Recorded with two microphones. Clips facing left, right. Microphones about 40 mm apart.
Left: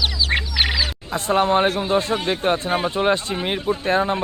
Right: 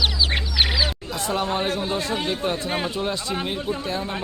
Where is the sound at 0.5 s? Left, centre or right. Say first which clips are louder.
Right 2 dB; centre.